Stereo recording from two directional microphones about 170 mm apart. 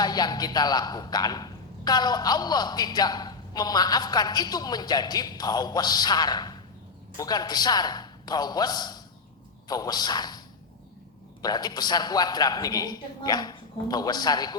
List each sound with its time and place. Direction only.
0.0 s a man's voice: 25° left (ahead or behind)
11.4 s a man's voice: 25° left (ahead or behind)